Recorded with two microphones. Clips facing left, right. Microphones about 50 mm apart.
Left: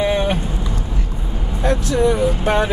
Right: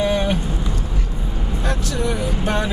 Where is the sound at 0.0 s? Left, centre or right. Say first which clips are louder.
Left 1 dB; left.